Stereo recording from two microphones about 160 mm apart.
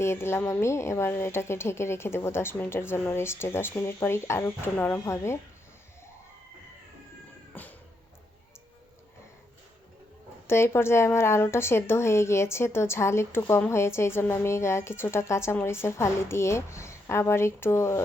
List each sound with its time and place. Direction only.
0.0 s a woman's voice: 15° left (ahead or behind)
7.5 s cat: 10° left (ahead or behind)
10.4 s a woman's voice: 15° left (ahead or behind)